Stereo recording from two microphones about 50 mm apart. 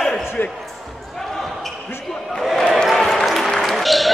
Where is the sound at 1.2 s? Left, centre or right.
Centre.